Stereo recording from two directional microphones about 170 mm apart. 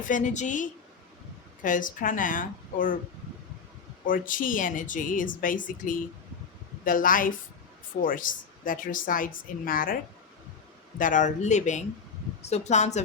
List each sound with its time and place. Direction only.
0.0 s a woman's voice: 50° left (ahead or behind)
4.0 s a woman's voice: 55° left (ahead or behind)